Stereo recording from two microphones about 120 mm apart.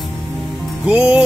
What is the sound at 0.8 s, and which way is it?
Music, 10° right (ahead or behind).